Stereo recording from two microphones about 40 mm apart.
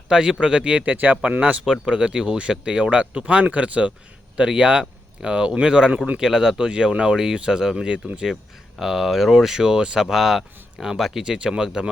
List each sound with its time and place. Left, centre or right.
0.1 s speech: right
0.9 s speech: right
1.6 s speech: centre
1.9 s speech: right
8.8 s speech: centre
11.2 s speech: centre